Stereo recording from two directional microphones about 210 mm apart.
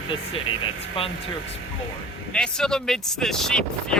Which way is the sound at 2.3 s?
5° left (ahead or behind).